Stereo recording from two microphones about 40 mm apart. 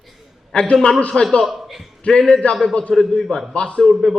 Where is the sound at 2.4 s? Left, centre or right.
Left.